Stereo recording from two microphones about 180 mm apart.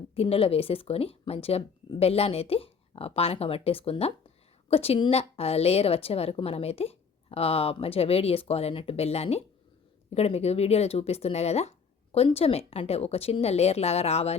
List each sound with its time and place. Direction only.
0.1 s a woman's voice: 30° left (ahead or behind)